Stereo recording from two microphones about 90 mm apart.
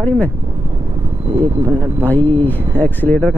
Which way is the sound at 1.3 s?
35° right (ahead or behind).